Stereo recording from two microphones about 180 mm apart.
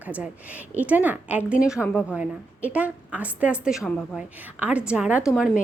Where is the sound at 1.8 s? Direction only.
10° left (ahead or behind).